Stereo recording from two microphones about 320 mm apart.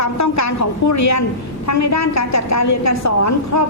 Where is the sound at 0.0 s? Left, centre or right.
Left.